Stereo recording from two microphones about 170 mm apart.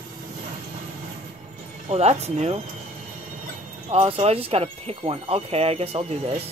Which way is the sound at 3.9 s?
35° right (ahead or behind).